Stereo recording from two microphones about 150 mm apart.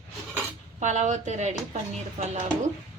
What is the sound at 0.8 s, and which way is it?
A woman's voice, 55° right (ahead or behind).